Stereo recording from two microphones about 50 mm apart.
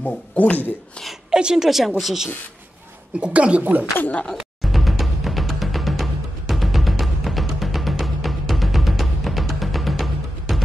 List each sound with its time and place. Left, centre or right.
0.0 s speech: left
1.3 s a woman's voice: centre
3.2 s a woman's voice: right
4.6 s timpani: centre